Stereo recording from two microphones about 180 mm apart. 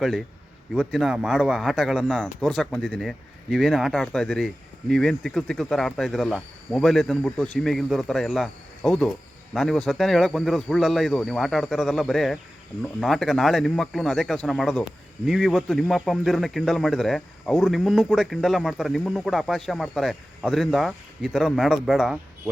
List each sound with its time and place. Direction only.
0.7 s speech: centre (ahead or behind)